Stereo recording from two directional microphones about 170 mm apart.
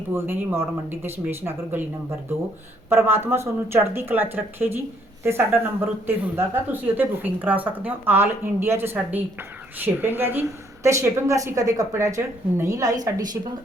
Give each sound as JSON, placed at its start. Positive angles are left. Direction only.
{"t": 0.1, "sound": "speech", "side_deg": -15}